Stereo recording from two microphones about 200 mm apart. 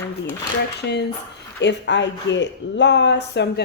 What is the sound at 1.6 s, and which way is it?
Speech, 60° left (ahead or behind).